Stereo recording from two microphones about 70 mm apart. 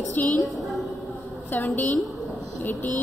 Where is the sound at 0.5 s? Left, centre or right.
Centre.